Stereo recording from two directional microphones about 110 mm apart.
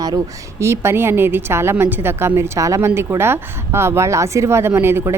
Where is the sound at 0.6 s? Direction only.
25° right (ahead or behind).